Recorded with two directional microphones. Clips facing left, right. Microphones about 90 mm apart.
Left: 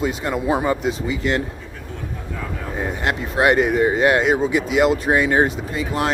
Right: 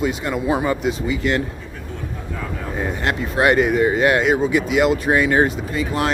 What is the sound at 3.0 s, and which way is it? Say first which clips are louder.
Speech: even; 20° left (ahead or behind).